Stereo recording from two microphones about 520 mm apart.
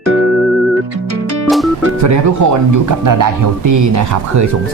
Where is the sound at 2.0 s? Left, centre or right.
Right.